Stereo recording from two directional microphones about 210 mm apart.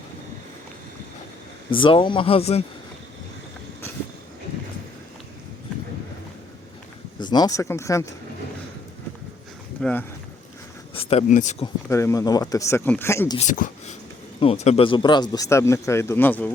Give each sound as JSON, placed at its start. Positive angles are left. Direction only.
{"t": 1.7, "sound": "speech", "side_deg": 25}
{"t": 7.2, "sound": "speech", "side_deg": 20}
{"t": 9.8, "sound": "speech", "side_deg": 10}
{"t": 10.9, "sound": "speech", "side_deg": 30}
{"t": 11.6, "sound": "speech", "side_deg": 15}
{"t": 13.3, "sound": "speech", "side_deg": 35}